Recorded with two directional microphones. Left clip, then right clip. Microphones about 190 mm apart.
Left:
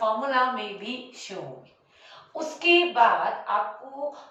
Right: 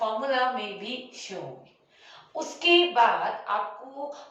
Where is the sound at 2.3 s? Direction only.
15° left (ahead or behind).